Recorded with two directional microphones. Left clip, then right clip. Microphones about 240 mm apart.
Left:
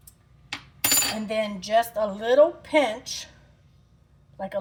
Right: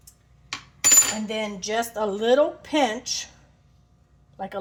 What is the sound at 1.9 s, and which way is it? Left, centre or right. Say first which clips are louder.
A woman's voice: even; right.